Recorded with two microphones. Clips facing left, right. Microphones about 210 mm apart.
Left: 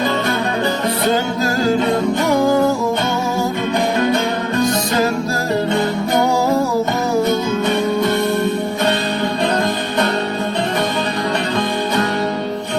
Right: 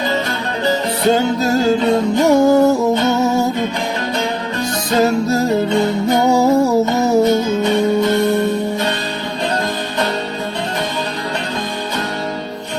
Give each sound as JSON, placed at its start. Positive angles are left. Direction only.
{"t": 2.2, "sound": "music", "side_deg": -25}
{"t": 5.0, "sound": "music", "side_deg": -25}